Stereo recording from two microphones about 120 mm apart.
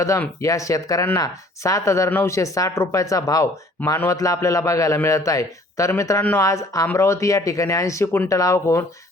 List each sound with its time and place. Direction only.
0.4 s speech: 25° left (ahead or behind)